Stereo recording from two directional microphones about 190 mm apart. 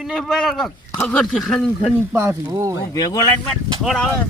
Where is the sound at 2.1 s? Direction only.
15° right (ahead or behind).